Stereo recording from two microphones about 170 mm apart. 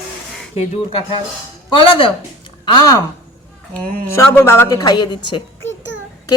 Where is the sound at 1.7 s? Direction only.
30° left (ahead or behind).